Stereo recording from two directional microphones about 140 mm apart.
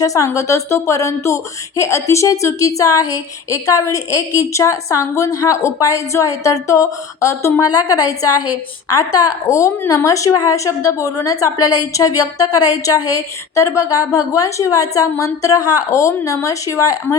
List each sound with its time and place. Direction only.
0.0 s a woman's voice: 25° left (ahead or behind)